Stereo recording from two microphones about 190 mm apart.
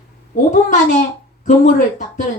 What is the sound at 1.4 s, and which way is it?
Speech, 40° left (ahead or behind).